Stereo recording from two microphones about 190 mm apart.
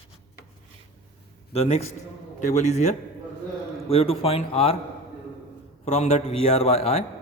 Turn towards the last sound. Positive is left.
turn(degrees=35)  # may be behind; listen again after turning